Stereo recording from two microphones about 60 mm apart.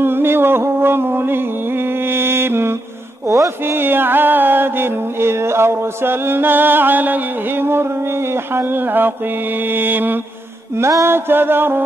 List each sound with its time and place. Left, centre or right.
0.0 s music: right
3.8 s music: right
8.5 s music: right
10.8 s music: right
11.1 s music: right